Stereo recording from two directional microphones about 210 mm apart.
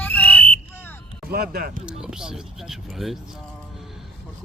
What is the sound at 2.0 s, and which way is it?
Speech, 5° right (ahead or behind).